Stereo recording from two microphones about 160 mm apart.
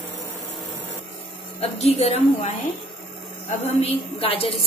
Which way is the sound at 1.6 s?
40° left (ahead or behind).